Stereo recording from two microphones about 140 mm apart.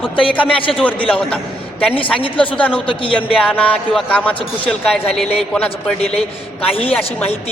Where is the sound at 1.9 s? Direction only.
40° left (ahead or behind).